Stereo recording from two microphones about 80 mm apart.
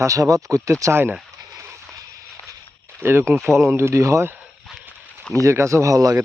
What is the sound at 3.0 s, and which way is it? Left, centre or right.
Speech, right.